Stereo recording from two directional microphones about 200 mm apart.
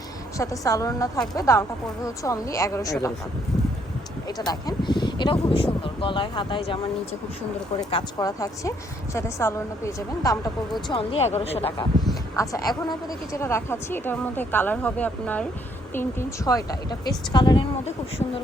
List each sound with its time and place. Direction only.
0.3 s a woman's voice: 15° left (ahead or behind)
4.4 s speech: 20° left (ahead or behind)
7.8 s a woman's voice: 20° left (ahead or behind)
10.8 s speech: 25° left (ahead or behind)
12.4 s a woman's voice: 15° left (ahead or behind)